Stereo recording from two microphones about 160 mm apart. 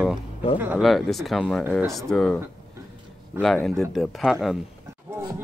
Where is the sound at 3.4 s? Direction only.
5° left (ahead or behind).